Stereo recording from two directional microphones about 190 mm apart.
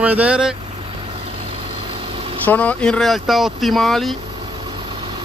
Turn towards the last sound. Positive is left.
turn(degrees=0)  # may be behind; listen again after turning